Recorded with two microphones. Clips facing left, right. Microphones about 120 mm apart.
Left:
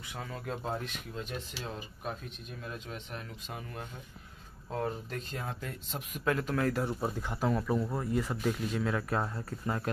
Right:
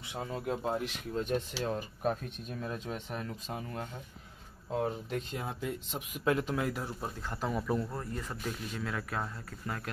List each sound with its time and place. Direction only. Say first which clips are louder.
0.0 s speech: right 4 dB; 20° right (ahead or behind)
1.1 s speech: right 10 dB; 45° right (ahead or behind)
4.7 s speech: right 2 dB; 15° right (ahead or behind)
6.2 s speech: even; 20° right (ahead or behind)
6.7 s speech: left 5 dB; centre (ahead or behind)
7.2 s speech: left 3 dB; 15° left (ahead or behind)
7.4 s speech: left 2 dB; centre (ahead or behind)
7.9 s speech: left 6 dB; 10° left (ahead or behind); by 9.8 s 25° left (ahead or behind)